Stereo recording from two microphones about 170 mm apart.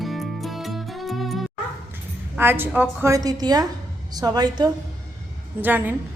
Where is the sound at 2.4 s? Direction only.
10° right (ahead or behind).